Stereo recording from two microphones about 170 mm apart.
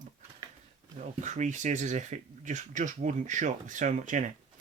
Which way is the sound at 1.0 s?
45° right (ahead or behind).